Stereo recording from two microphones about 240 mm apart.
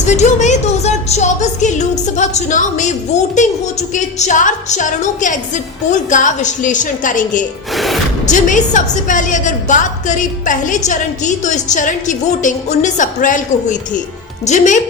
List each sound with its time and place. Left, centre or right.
0.0 s a woman's voice: left